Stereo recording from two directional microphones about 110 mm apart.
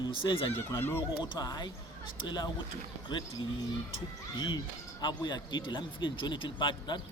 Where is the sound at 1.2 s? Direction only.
35° left (ahead or behind).